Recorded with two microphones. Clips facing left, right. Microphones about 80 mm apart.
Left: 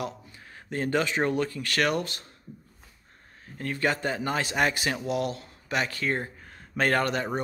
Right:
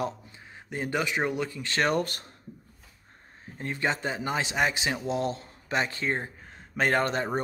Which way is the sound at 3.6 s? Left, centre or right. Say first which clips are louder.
Left 2 dB; right.